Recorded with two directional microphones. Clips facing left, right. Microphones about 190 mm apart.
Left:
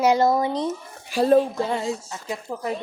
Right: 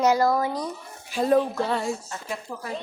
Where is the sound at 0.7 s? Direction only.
35° left (ahead or behind).